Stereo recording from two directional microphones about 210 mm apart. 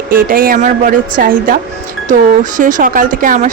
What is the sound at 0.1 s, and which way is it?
Speech, 40° right (ahead or behind).